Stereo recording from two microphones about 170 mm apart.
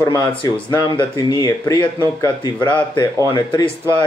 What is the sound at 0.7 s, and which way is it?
Speech, 25° left (ahead or behind).